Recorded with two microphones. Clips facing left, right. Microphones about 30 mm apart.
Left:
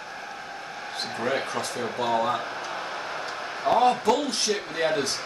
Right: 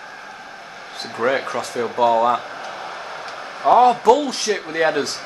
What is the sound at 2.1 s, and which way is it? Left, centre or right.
Speech, right.